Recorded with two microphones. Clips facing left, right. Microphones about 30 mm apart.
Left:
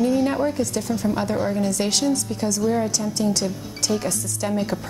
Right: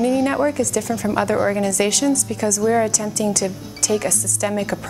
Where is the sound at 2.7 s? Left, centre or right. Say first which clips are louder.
Right 4 dB; right.